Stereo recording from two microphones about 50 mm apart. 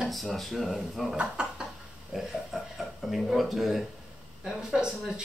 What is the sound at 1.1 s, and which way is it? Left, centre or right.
Speech, right.